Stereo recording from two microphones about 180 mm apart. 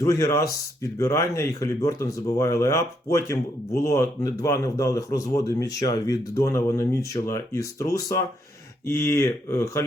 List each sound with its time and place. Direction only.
0.0 s speech: 20° left (ahead or behind)